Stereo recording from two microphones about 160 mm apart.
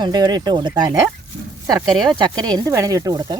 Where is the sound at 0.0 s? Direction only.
25° right (ahead or behind).